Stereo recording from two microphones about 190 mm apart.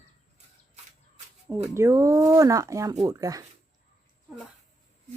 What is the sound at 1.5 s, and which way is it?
Speech, 15° right (ahead or behind).